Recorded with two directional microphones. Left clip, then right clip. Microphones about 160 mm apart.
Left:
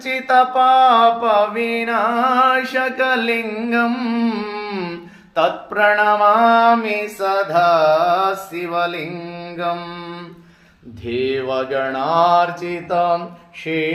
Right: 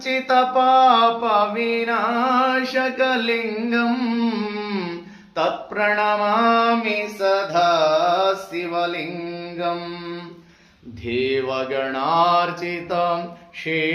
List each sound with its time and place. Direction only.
0.0 s mantra: 15° left (ahead or behind)
11.0 s mantra: centre (ahead or behind)